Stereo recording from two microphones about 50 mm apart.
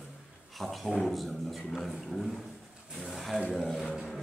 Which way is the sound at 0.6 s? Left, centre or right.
Centre.